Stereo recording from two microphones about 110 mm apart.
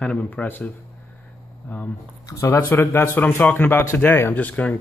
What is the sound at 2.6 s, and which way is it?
Speech, 20° left (ahead or behind).